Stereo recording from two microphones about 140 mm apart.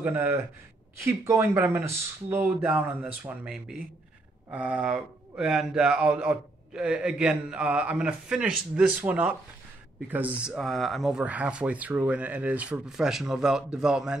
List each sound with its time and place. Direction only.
0.0 s speech: 20° right (ahead or behind)
10.6 s speech: centre (ahead or behind)